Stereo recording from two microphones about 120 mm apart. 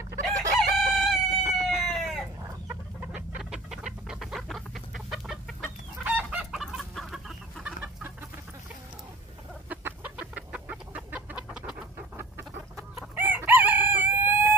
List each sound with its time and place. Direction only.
0.6 s chicken: centre (ahead or behind)
9.7 s chicken: 15° right (ahead or behind)
13.1 s chicken: 15° right (ahead or behind)